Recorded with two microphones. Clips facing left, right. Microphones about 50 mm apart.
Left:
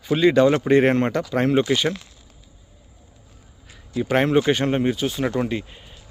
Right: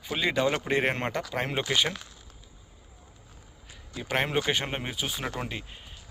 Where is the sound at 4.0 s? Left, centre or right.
Centre.